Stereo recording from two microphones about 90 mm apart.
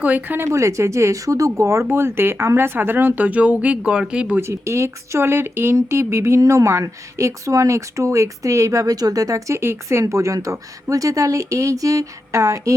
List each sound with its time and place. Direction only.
0.0 s speech: 20° right (ahead or behind)
4.4 s speech: 30° right (ahead or behind)